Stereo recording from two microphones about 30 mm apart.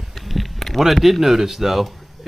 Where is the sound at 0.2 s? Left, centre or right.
Centre.